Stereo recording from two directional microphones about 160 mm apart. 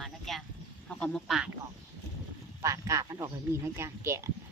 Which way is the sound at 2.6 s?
20° right (ahead or behind).